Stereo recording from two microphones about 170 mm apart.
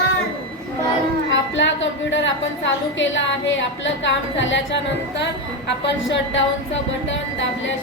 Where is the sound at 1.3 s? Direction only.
90° left.